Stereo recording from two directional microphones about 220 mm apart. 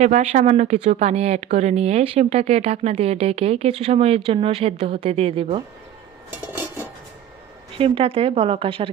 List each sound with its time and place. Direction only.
0.0 s speech: 35° right (ahead or behind)
7.8 s speech: 25° right (ahead or behind)